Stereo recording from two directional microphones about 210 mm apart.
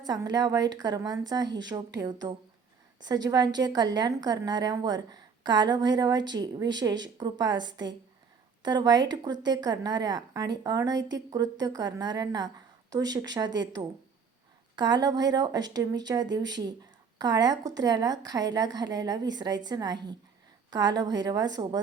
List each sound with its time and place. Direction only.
0.0 s a woman's voice: 20° right (ahead or behind)